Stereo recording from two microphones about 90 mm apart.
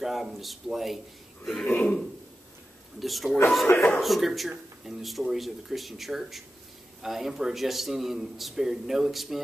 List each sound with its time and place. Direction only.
0.0 s a man's voice: 5° right (ahead or behind)
3.0 s a man's voice: centre (ahead or behind)
3.7 s speech: 25° left (ahead or behind)
4.0 s a man's voice: centre (ahead or behind)